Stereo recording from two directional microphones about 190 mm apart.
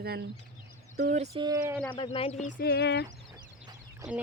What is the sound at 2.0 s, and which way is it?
Speech, 30° left (ahead or behind).